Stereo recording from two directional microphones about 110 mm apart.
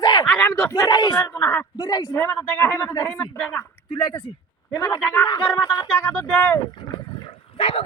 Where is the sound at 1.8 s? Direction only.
35° left (ahead or behind).